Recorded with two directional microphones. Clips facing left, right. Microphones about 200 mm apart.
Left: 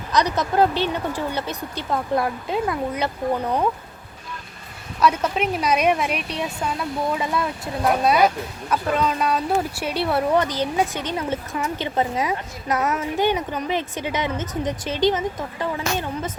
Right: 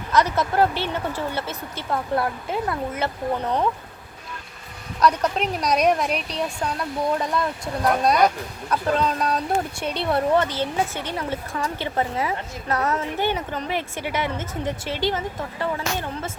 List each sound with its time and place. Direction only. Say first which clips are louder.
0.1 s speech: even; 15° left (ahead or behind)
4.9 s speech: even; 5° left (ahead or behind)